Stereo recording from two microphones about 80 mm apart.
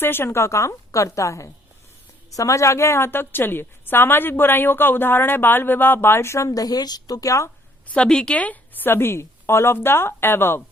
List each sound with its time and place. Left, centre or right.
0.0 s a woman's voice: left
7.9 s a woman's voice: centre; by 10.6 s left